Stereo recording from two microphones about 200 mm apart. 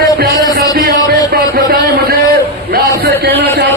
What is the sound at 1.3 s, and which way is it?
A man's voice, 50° right (ahead or behind).